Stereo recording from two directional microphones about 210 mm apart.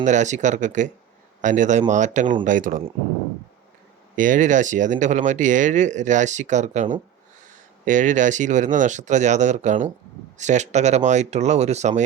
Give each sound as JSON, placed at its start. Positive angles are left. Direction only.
{"t": 0.0, "sound": "speech", "side_deg": -35}
{"t": 4.1, "sound": "speech", "side_deg": -40}